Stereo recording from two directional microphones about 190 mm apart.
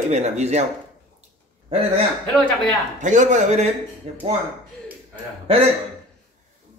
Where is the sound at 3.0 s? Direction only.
40° right (ahead or behind).